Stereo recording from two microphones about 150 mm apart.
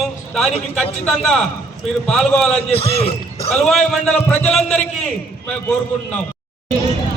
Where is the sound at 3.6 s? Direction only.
5° left (ahead or behind).